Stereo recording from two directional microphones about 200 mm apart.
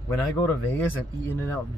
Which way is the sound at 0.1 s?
15° left (ahead or behind).